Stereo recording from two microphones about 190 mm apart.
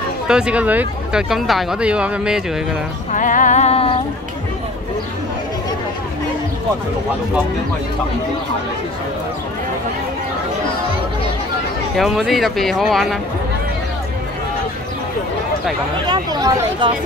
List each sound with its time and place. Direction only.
0.3 s speech: 5° right (ahead or behind)
3.1 s a sound: 45° left (ahead or behind)
12.0 s speech: centre (ahead or behind)
16.1 s speech: 20° right (ahead or behind)